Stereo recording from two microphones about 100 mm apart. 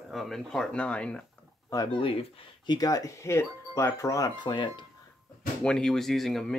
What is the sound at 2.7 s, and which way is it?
Speech, 40° left (ahead or behind).